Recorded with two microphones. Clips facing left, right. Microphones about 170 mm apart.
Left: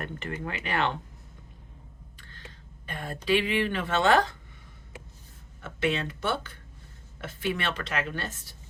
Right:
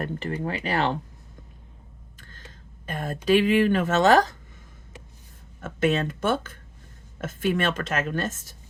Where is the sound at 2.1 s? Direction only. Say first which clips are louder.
Right 1 dB; 45° right (ahead or behind).